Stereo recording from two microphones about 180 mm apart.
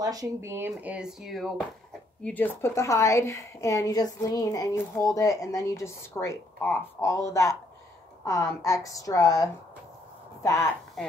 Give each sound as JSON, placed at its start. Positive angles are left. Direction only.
{"t": 0.0, "sound": "speech", "side_deg": -20}
{"t": 2.2, "sound": "a woman's voice", "side_deg": 10}